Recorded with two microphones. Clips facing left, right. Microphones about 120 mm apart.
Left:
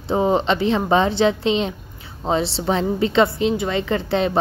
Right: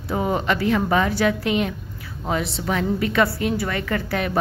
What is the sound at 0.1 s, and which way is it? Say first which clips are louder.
Speech: left 4 dB; 25° left (ahead or behind).